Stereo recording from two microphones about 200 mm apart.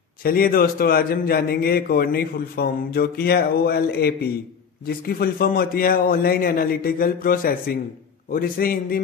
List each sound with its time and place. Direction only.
0.2 s a man's voice: 45° left (ahead or behind)